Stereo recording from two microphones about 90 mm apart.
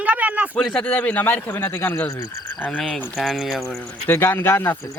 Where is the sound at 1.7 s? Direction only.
30° left (ahead or behind).